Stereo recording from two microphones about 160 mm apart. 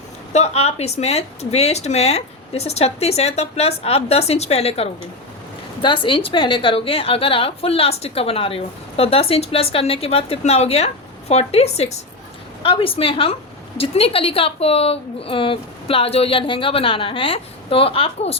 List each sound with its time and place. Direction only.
0.3 s a woman's voice: 40° left (ahead or behind)